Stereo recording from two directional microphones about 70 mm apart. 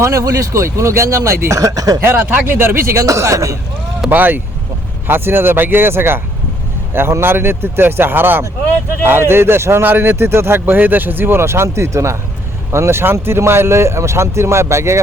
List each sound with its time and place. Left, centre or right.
0.0 s speech: right
2.0 s speech: right
3.0 s speech: right
4.1 s speech: right